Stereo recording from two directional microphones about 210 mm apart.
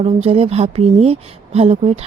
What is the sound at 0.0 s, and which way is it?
Speech, 30° right (ahead or behind).